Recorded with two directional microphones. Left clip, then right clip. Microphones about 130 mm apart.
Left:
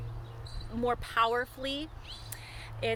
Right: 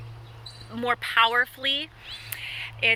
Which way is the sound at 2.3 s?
40° left (ahead or behind).